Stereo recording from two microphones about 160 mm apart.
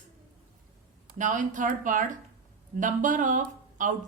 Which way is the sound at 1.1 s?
55° right (ahead or behind).